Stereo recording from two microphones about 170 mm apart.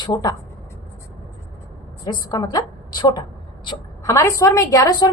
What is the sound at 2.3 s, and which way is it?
A woman's voice, 25° left (ahead or behind).